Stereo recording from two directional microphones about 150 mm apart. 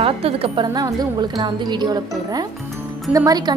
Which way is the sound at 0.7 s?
25° right (ahead or behind).